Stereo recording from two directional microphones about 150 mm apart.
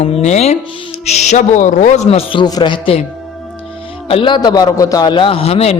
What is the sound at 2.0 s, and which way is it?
Speech, 35° left (ahead or behind).